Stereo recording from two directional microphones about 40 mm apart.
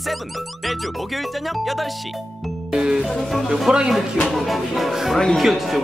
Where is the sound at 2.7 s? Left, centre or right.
Centre.